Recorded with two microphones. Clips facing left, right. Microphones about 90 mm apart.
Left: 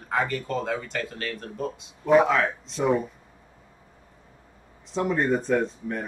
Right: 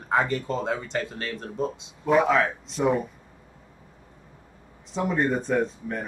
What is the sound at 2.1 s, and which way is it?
Speech, centre (ahead or behind).